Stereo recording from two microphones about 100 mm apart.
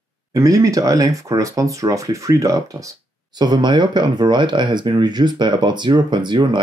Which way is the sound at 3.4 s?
45° right (ahead or behind).